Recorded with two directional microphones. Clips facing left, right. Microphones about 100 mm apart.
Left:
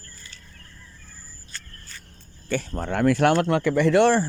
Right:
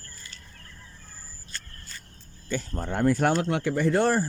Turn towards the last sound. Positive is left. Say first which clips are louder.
# left 5 dB
turn(degrees=85)